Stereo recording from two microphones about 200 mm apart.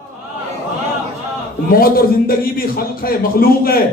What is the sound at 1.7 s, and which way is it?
A man's voice, 50° left (ahead or behind).